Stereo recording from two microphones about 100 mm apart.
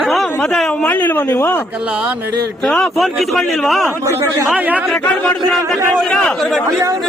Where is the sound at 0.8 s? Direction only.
20° left (ahead or behind).